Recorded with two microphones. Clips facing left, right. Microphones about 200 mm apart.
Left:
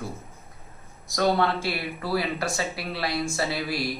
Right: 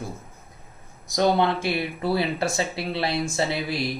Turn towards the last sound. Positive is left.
turn(degrees=-20)  # may be behind; listen again after turning